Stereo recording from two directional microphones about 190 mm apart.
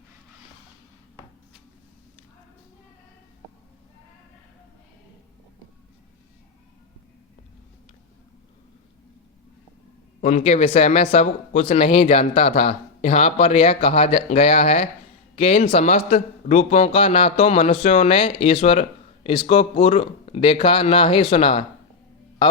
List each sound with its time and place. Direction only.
10.2 s a man's voice: 40° left (ahead or behind)